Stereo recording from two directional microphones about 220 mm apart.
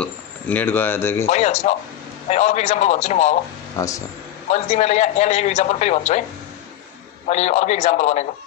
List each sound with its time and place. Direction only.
0.0 s speech: 5° left (ahead or behind)
1.2 s a man's voice: 30° left (ahead or behind)
3.7 s speech: 15° left (ahead or behind)
4.5 s a man's voice: 30° left (ahead or behind)
7.2 s a man's voice: 30° left (ahead or behind)